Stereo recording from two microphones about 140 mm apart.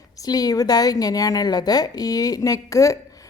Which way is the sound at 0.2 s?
25° left (ahead or behind).